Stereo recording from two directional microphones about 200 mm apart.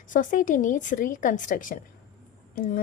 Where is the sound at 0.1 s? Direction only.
40° left (ahead or behind).